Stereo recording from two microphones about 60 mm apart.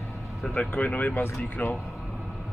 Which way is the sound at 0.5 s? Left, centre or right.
Left.